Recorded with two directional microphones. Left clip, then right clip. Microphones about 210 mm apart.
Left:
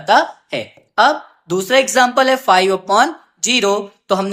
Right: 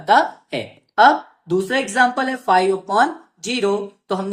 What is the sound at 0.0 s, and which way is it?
Speech, 25° left (ahead or behind).